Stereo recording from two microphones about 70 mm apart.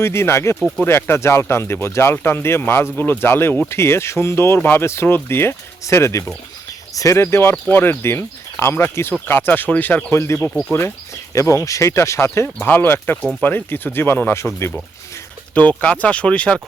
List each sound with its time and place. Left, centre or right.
0.0 s speech: left
10.1 s speech: left
12.6 s speech: left
15.8 s speech: centre